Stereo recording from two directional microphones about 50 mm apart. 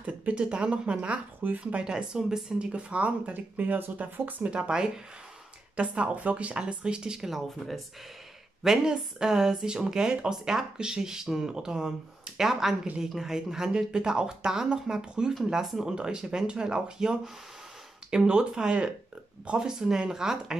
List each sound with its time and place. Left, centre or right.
0.0 s speech: right
4.5 s speech: centre
5.8 s speech: right; by 7.8 s centre
8.6 s speech: centre